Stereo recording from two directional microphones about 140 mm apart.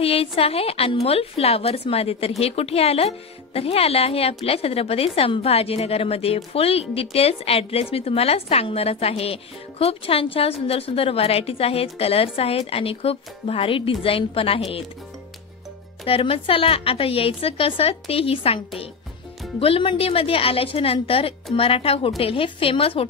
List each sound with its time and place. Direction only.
0.0 s a woman's voice: 45° left (ahead or behind)
16.1 s a woman's voice: 40° left (ahead or behind)
19.6 s a woman's voice: 40° left (ahead or behind)